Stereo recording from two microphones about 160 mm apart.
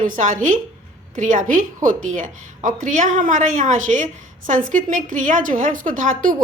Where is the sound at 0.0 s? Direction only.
50° right (ahead or behind).